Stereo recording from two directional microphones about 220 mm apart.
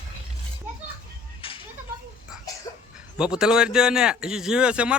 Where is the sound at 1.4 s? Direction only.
25° left (ahead or behind).